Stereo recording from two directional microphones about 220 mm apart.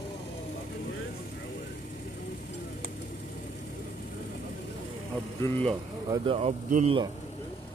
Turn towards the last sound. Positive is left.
turn(degrees=-30)  # may be behind; listen again after turning